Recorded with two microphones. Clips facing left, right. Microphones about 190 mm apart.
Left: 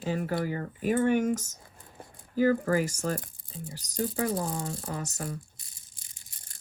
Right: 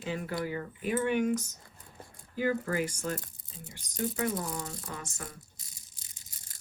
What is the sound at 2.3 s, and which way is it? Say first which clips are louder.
Speech: left 6 dB; 45° left (ahead or behind).